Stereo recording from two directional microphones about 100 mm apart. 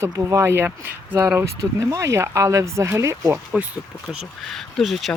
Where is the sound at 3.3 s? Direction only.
15° right (ahead or behind).